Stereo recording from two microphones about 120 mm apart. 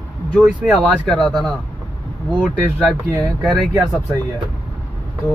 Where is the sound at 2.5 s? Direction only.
10° right (ahead or behind).